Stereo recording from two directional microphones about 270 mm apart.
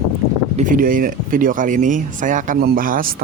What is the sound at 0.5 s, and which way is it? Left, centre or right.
Speech, right.